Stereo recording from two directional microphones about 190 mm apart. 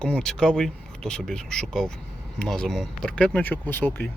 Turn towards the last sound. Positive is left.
turn(degrees=10)  # may be behind; listen again after turning